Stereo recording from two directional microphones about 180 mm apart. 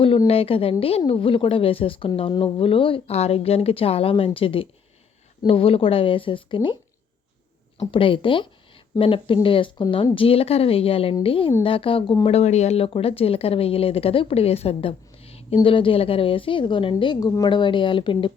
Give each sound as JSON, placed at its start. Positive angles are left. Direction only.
{"t": 0.0, "sound": "a woman's voice", "side_deg": 30}
{"t": 7.8, "sound": "a woman's voice", "side_deg": 30}